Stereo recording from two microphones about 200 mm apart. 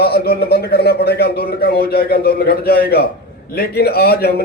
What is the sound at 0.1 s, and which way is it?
A man's voice, 50° left (ahead or behind).